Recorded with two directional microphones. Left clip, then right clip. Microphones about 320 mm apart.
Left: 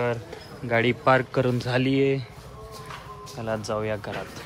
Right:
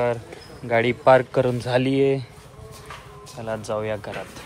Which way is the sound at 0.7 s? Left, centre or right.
Centre.